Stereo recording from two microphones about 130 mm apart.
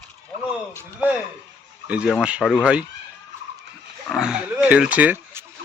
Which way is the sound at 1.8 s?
10° right (ahead or behind).